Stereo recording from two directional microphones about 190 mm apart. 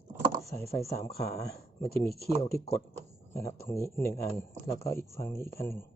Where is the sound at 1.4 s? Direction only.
55° left (ahead or behind).